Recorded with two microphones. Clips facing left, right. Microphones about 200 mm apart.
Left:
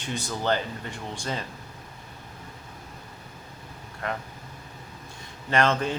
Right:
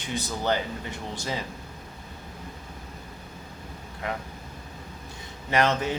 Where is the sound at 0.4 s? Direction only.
10° right (ahead or behind).